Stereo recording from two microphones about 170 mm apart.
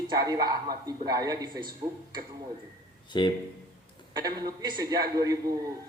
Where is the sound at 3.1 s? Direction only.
25° left (ahead or behind).